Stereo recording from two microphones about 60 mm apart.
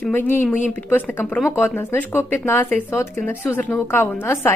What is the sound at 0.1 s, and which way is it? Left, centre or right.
A woman's voice, left.